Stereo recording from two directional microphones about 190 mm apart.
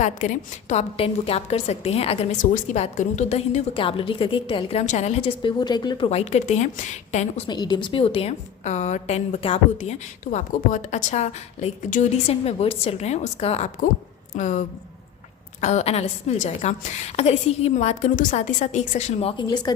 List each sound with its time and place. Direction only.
0.0 s a woman's voice: 40° left (ahead or behind); by 6.1 s 20° left (ahead or behind)
6.1 s a woman's voice: 35° left (ahead or behind)
7.4 s a woman's voice: 20° left (ahead or behind); by 14.6 s 40° left (ahead or behind)
15.6 s a woman's voice: 35° left (ahead or behind)